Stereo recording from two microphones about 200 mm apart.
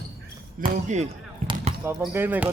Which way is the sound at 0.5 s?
40° right (ahead or behind).